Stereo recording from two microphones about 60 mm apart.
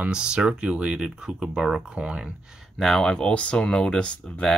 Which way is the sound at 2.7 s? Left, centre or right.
Centre.